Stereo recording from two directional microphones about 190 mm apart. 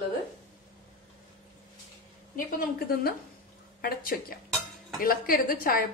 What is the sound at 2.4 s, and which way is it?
A woman's voice, 45° left (ahead or behind).